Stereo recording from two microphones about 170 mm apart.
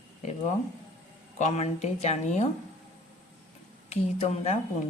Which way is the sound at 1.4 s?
45° left (ahead or behind).